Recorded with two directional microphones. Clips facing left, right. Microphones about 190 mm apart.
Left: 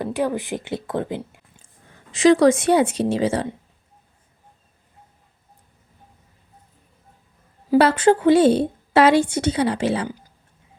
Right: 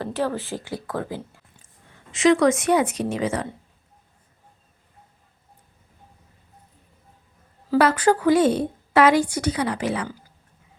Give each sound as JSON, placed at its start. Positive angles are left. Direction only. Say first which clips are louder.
{"t": 0.0, "sound": "speech", "louder": "left 3 dB", "side_deg": 15}
{"t": 2.1, "sound": "a woman's voice", "louder": "left 3 dB", "side_deg": 35}
{"t": 7.8, "sound": "a woman's voice", "louder": "left 3 dB", "side_deg": 25}